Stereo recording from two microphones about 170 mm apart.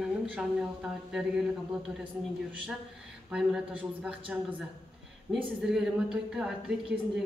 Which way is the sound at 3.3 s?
5° right (ahead or behind).